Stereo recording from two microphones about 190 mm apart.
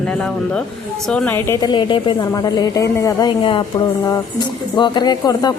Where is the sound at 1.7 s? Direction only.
25° left (ahead or behind).